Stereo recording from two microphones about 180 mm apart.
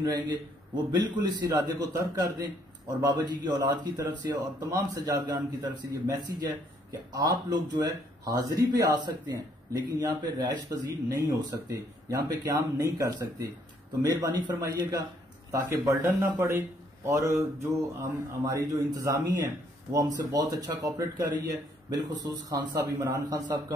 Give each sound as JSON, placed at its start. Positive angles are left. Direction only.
{"t": 0.0, "sound": "a man's voice", "side_deg": -25}
{"t": 14.5, "sound": "a man's voice", "side_deg": -20}